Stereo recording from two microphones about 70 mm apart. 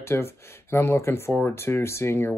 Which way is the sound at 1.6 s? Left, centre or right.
Left.